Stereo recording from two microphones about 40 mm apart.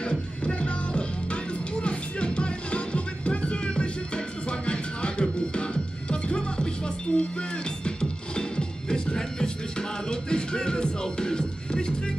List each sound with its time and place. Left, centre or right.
0.0 s music: left